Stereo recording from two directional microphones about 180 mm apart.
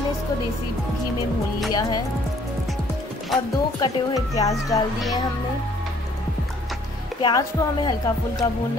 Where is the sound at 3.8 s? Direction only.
20° left (ahead or behind).